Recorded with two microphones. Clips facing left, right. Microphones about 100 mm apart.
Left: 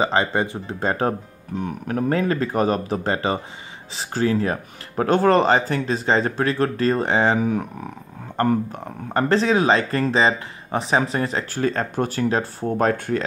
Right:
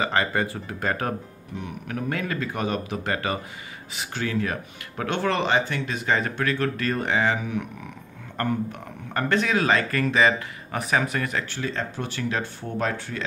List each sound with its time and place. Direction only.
0.0 s speech: 25° left (ahead or behind)
11.5 s speech: 45° left (ahead or behind)